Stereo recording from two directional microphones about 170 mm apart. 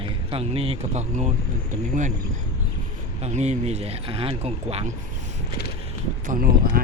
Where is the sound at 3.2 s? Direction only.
40° right (ahead or behind).